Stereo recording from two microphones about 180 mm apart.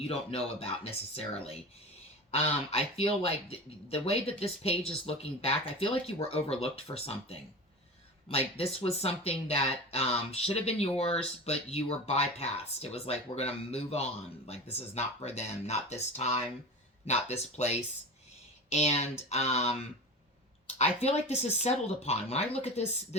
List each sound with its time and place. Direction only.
0.1 s speech: 35° left (ahead or behind)